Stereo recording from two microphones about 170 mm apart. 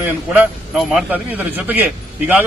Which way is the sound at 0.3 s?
5° right (ahead or behind).